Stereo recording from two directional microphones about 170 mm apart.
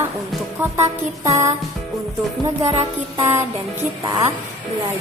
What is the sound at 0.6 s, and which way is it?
Speech, 20° right (ahead or behind).